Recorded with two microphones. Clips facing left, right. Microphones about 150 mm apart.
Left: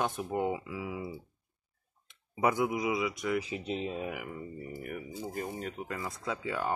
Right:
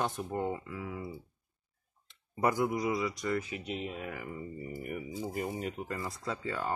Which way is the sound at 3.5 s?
30° left (ahead or behind).